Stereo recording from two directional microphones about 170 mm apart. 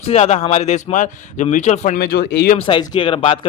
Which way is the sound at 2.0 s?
65° left (ahead or behind).